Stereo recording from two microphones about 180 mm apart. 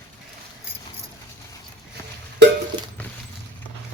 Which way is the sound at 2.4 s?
70° right (ahead or behind).